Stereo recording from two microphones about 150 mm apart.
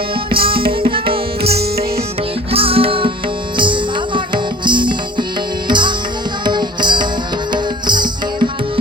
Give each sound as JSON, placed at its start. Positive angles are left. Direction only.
{"t": 0.3, "sound": "music", "side_deg": -35}
{"t": 2.5, "sound": "music", "side_deg": -40}